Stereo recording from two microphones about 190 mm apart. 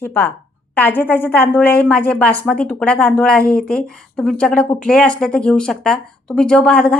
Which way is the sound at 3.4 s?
50° left (ahead or behind).